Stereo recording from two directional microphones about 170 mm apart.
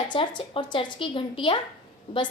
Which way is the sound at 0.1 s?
30° left (ahead or behind).